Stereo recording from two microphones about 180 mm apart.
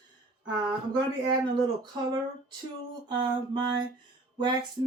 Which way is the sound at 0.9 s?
25° right (ahead or behind).